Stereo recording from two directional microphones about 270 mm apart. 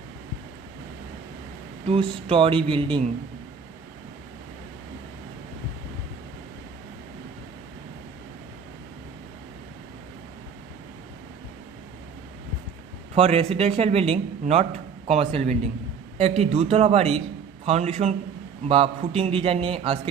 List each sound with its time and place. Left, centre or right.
1.9 s a man's voice: centre
13.1 s a man's voice: right